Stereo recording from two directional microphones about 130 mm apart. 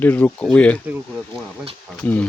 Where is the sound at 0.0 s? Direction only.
15° left (ahead or behind).